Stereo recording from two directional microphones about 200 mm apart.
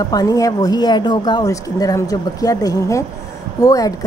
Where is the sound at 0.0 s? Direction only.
20° left (ahead or behind).